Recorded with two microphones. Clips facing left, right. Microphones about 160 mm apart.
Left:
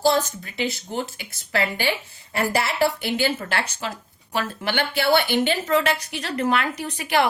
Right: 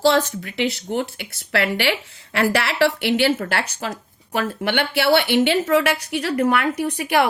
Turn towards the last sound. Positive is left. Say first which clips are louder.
# right 3 dB
turn(degrees=-60)  # may be behind; listen again after turning